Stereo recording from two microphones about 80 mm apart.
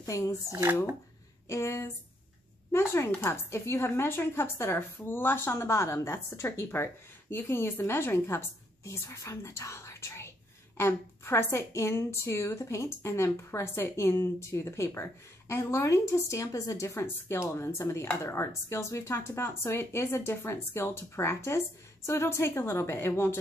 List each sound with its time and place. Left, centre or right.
0.0 s speech: left
1.5 s a woman's voice: left